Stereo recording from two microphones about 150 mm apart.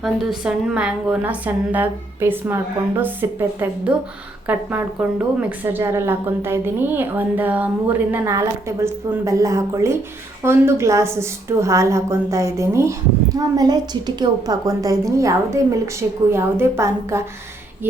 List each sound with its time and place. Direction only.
0.0 s a woman's voice: 5° right (ahead or behind)